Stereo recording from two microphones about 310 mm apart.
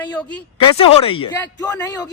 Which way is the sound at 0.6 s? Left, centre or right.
Centre.